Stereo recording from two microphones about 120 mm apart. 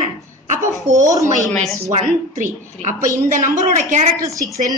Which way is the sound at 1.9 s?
80° right.